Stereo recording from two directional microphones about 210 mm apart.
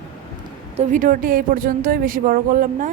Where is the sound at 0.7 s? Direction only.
40° right (ahead or behind).